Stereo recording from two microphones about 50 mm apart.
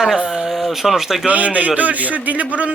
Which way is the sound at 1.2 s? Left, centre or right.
Right.